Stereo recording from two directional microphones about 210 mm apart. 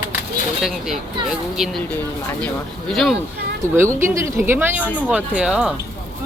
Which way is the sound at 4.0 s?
10° right (ahead or behind).